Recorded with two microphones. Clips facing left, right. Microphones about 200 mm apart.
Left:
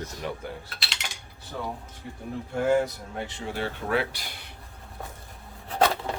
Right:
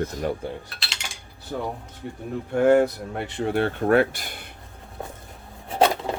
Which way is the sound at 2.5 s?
60° right (ahead or behind).